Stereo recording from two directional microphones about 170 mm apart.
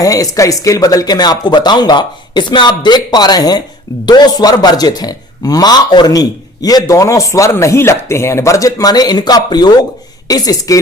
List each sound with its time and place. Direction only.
0.0 s a man's voice: 20° left (ahead or behind)